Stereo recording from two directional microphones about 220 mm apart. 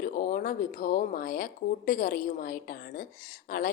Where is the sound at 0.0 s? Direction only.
40° left (ahead or behind).